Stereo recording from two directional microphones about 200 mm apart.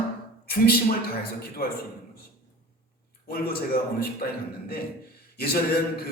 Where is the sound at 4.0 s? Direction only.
50° left (ahead or behind).